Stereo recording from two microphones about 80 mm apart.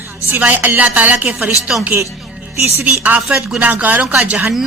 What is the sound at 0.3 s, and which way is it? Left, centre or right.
A woman's voice, right.